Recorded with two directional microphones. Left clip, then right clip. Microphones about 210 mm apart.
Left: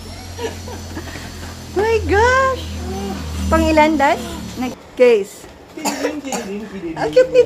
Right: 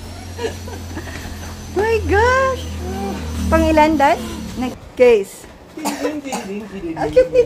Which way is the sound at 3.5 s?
Centre (ahead or behind).